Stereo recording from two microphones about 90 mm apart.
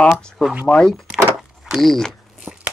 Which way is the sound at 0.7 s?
10° left (ahead or behind).